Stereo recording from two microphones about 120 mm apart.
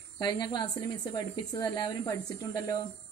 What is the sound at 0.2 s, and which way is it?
A woman's voice, 40° left (ahead or behind).